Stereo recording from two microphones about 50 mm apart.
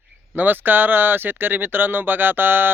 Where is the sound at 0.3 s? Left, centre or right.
Right.